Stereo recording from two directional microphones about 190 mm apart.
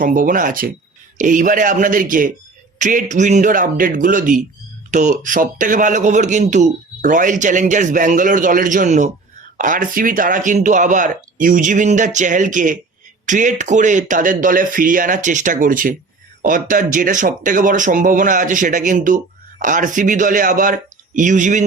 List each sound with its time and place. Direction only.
0.0 s speech: 45° right (ahead or behind)